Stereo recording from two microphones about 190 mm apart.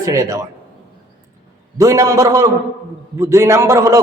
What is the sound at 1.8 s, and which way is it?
A man's voice, 15° right (ahead or behind).